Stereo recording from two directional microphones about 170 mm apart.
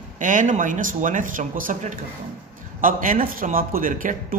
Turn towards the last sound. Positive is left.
turn(degrees=-55)  # may be behind; listen again after turning